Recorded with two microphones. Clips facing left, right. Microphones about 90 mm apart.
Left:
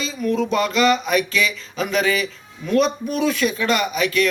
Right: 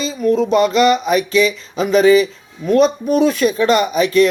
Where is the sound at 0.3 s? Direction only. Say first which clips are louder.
Right 7 dB; 30° right (ahead or behind).